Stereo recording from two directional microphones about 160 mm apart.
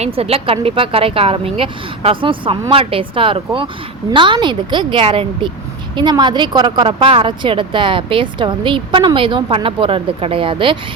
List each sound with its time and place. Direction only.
0.0 s a woman's voice: 40° right (ahead or behind)